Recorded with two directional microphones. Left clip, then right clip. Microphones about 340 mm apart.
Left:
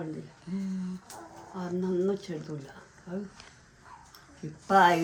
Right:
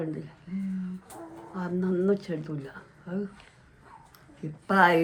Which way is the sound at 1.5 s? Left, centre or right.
Centre.